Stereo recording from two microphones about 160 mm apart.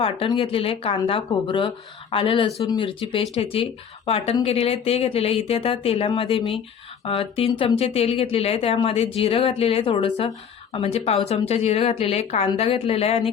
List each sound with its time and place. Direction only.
0.0 s a woman's voice: 35° left (ahead or behind)